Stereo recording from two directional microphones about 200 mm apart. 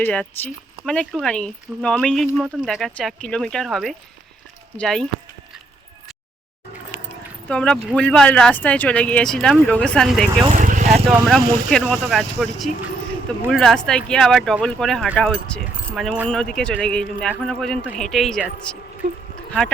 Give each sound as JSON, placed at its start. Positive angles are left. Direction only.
{"t": 0.0, "sound": "speech", "side_deg": 10}
{"t": 7.4, "sound": "speech", "side_deg": 5}
{"t": 10.4, "sound": "a sound", "side_deg": -40}
{"t": 11.1, "sound": "speech", "side_deg": 0}